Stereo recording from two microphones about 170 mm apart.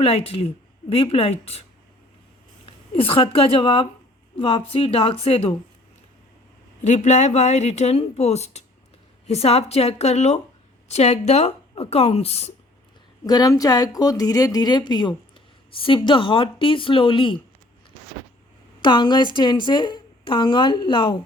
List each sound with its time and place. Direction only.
0.0 s speech: 35° left (ahead or behind)
2.9 s speech: 35° left (ahead or behind)
6.8 s speech: 45° left (ahead or behind)
13.2 s a woman's voice: 20° left (ahead or behind)
18.8 s a woman's voice: 25° left (ahead or behind)